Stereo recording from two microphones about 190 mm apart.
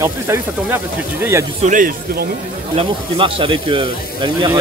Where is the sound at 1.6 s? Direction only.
45° right (ahead or behind).